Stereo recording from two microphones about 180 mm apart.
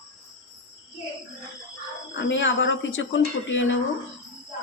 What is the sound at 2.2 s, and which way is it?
Speech, 90° left.